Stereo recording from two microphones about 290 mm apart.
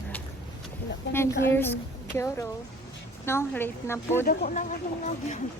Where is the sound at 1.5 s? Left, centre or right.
Centre.